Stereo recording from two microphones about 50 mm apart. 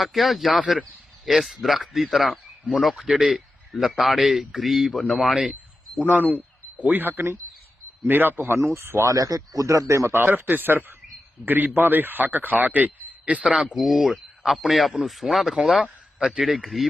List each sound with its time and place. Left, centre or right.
0.0 s speech: centre
6.1 s a man's voice: right
8.5 s speech: right
8.8 s speech: right
9.6 s a man's voice: right
10.2 s a man's voice: right
13.7 s speech: centre
15.5 s speech: centre